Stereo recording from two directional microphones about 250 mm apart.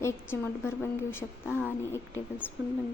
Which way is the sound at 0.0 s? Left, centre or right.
Centre.